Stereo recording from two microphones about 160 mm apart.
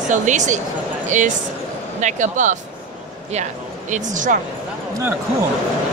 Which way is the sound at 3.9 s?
55° right (ahead or behind).